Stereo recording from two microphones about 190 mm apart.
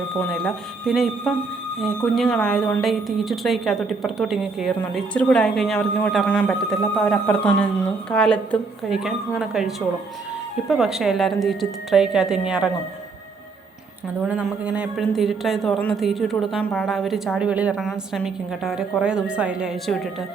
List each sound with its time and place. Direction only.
0.2 s speech: centre (ahead or behind)
14.2 s speech: 5° right (ahead or behind)